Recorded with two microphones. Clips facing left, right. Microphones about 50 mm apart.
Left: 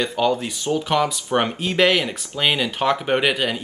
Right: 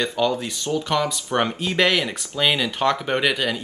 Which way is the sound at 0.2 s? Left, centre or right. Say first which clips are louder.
Left 2 dB; centre.